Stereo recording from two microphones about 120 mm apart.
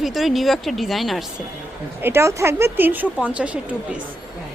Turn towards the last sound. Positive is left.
turn(degrees=-10)  # may be behind; listen again after turning